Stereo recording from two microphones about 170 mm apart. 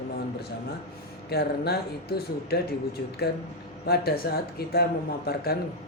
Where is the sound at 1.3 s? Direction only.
70° left (ahead or behind).